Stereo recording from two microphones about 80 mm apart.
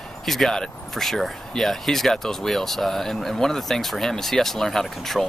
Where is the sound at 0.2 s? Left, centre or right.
Centre.